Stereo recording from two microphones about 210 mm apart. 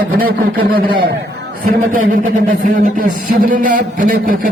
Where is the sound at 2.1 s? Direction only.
35° right (ahead or behind).